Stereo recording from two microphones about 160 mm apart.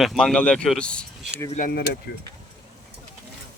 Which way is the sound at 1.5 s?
70° left (ahead or behind).